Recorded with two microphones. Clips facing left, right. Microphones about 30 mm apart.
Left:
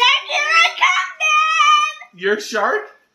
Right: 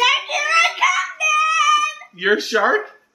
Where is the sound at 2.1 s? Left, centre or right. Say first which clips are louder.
Right 5 dB; right.